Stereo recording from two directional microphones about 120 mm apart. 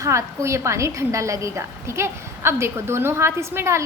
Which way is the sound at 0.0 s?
25° right (ahead or behind).